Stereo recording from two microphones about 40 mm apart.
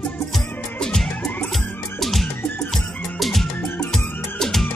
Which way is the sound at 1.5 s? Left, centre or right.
Centre.